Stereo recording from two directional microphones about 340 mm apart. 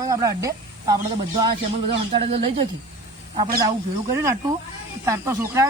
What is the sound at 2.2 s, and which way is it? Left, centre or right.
Speech, centre.